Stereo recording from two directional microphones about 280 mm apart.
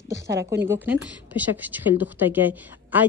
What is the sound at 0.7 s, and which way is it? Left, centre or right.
Speech, centre.